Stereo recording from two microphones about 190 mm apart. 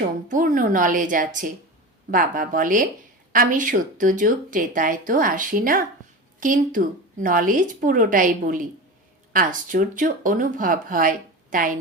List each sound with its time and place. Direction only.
0.0 s speech: 45° right (ahead or behind)